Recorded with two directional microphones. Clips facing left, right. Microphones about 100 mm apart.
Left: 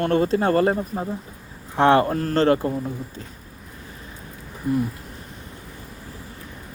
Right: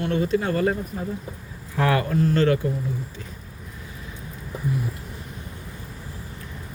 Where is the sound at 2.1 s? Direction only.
50° left (ahead or behind).